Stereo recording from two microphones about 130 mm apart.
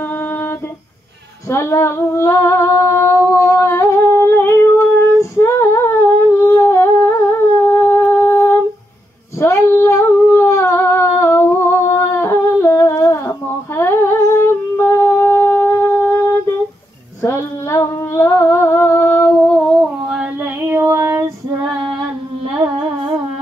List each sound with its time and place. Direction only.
1.5 s humming: 20° left (ahead or behind)
5.4 s female singing: 20° left (ahead or behind)
6.4 s humming: 20° left (ahead or behind); by 20.2 s centre (ahead or behind)
20.6 s female singing: 20° right (ahead or behind)